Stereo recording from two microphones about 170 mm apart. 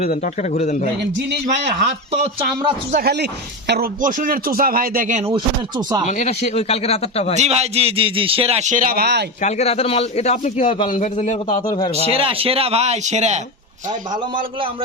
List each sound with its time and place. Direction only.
0.5 s a man's voice: 45° left (ahead or behind)
1.5 s speech: 45° right (ahead or behind)
2.9 s speech: 70° right (ahead or behind)
4.0 s speech: 55° right (ahead or behind)
5.2 s speech: 25° right (ahead or behind)
6.1 s speech: 45° left (ahead or behind)
7.3 s a man's voice: 40° right (ahead or behind); by 9.2 s 70° right (ahead or behind)
9.4 s a man's voice: 40° left (ahead or behind)
12.1 s a man's voice: 35° right (ahead or behind)